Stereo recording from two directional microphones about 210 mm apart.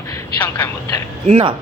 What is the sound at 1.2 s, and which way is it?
Speech, 25° right (ahead or behind).